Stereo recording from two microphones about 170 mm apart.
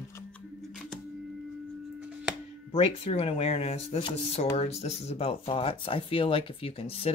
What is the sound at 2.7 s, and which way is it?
Speech, 35° left (ahead or behind).